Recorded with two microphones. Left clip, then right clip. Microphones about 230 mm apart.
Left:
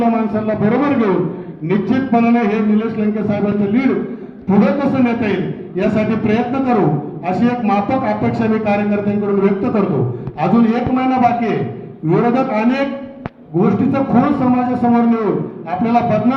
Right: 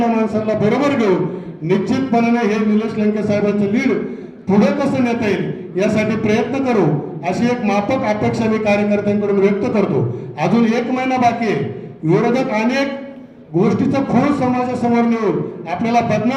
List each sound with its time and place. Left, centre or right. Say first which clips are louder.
0.0 s a man's voice: even; right